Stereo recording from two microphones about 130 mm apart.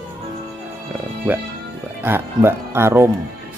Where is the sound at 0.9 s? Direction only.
15° right (ahead or behind).